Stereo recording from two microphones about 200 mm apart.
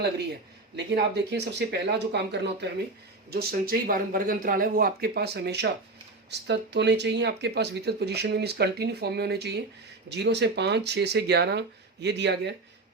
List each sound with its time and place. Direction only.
0.9 s speech: 55° right (ahead or behind)